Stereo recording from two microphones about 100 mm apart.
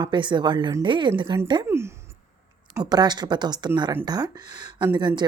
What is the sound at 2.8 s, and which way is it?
Speech, 45° right (ahead or behind).